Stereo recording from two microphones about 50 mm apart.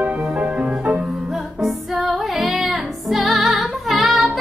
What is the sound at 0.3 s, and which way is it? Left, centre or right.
Music, right.